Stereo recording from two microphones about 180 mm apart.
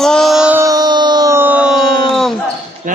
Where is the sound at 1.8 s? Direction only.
55° right (ahead or behind).